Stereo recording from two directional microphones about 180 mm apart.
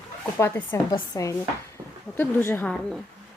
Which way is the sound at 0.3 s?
15° left (ahead or behind).